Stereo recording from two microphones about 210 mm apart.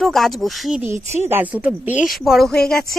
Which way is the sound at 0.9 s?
30° right (ahead or behind).